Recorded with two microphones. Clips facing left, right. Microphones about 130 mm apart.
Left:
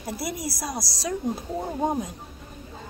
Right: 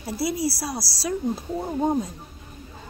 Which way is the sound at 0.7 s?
20° left (ahead or behind).